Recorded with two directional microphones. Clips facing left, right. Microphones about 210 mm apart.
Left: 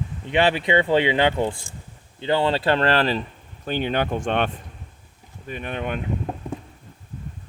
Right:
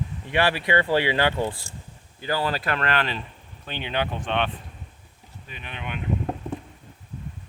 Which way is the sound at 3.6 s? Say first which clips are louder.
Left 5 dB; 45° left (ahead or behind).